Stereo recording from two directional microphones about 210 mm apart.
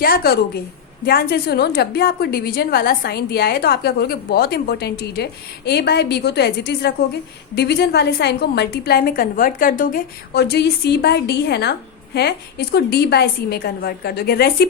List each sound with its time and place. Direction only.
0.0 s a woman's voice: 45° left (ahead or behind)